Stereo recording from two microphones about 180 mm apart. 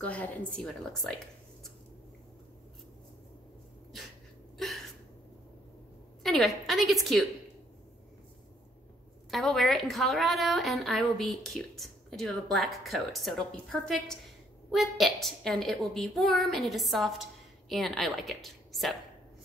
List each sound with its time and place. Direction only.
0.0 s a woman's voice: 10° left (ahead or behind)
4.6 s a sound: centre (ahead or behind)
6.2 s a woman's voice: centre (ahead or behind)
9.3 s a woman's voice: centre (ahead or behind)